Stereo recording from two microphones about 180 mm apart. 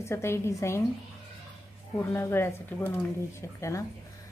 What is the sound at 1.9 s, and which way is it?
A woman's voice, 15° left (ahead or behind).